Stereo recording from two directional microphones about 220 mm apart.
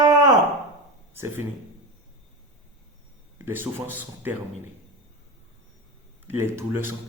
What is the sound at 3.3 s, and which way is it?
Speech, 10° right (ahead or behind).